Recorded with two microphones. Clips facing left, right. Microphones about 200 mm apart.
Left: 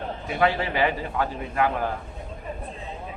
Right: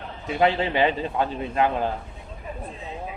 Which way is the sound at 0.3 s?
20° right (ahead or behind).